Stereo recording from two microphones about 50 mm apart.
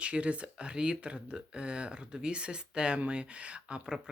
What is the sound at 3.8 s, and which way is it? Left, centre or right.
Speech, centre.